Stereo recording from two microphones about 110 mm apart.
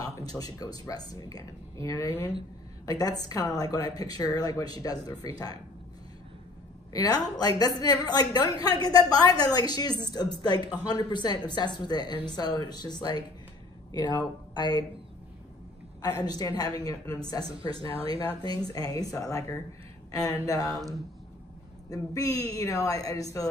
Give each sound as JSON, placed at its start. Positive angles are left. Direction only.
{"t": 0.0, "sound": "a woman's voice", "side_deg": 30}
{"t": 2.9, "sound": "a woman's voice", "side_deg": 35}
{"t": 6.9, "sound": "a woman's voice", "side_deg": 35}
{"t": 16.0, "sound": "a woman's voice", "side_deg": 35}
{"t": 17.7, "sound": "speech", "side_deg": -55}
{"t": 18.6, "sound": "a woman's voice", "side_deg": 35}
{"t": 21.8, "sound": "a woman's voice", "side_deg": 30}